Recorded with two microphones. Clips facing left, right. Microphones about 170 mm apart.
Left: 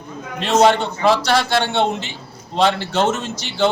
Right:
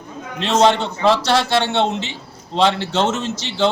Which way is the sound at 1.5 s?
25° right (ahead or behind).